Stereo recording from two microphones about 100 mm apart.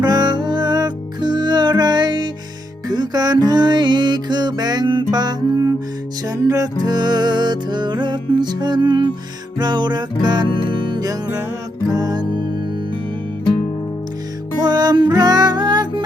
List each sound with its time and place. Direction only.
0.0 s music: 45° right (ahead or behind)
14.6 s music: 45° right (ahead or behind)